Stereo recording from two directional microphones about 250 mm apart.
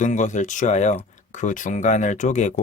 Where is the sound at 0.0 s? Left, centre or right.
Left.